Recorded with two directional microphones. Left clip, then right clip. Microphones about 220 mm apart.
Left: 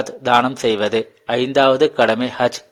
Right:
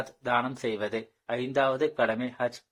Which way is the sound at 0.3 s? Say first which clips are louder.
Left 13 dB; 35° left (ahead or behind).